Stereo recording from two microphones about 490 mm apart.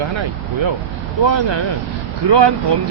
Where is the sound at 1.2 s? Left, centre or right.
Right.